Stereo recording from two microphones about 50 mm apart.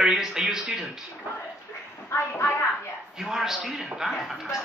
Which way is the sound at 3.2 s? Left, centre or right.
Centre.